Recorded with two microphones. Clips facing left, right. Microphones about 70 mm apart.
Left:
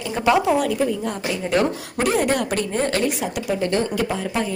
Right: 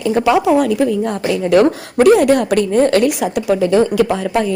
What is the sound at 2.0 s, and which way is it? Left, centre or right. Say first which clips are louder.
Speech: right 10 dB; right.